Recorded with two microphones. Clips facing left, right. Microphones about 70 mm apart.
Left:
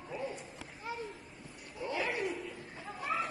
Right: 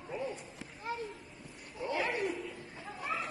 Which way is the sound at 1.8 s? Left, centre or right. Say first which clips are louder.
Right 1 dB; right.